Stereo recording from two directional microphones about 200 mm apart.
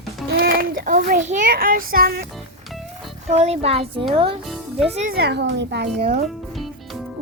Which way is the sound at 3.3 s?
35° right (ahead or behind).